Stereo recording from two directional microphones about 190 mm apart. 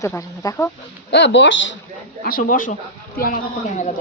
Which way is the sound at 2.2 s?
45° left (ahead or behind).